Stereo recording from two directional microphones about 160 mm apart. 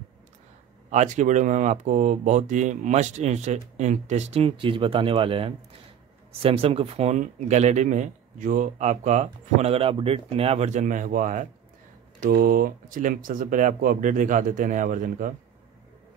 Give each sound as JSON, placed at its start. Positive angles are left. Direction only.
{"t": 0.8, "sound": "speech", "side_deg": -50}